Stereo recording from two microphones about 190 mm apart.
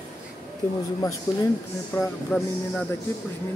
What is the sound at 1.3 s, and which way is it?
Speech, 15° left (ahead or behind).